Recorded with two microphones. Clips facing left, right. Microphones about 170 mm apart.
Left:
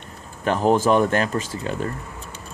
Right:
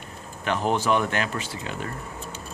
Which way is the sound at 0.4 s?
40° left (ahead or behind).